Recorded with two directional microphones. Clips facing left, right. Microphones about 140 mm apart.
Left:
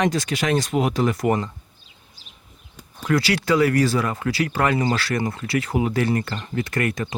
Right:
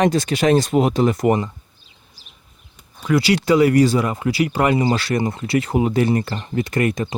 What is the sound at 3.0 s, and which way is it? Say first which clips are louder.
Speech: right 4 dB; 15° right (ahead or behind).